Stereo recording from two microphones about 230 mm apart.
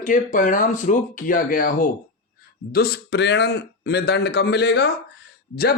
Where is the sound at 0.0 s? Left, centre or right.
Left.